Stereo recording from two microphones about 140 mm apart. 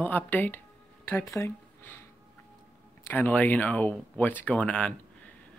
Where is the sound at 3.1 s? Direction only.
10° left (ahead or behind).